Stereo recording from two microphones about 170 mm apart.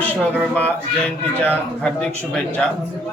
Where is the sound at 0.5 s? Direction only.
10° left (ahead or behind).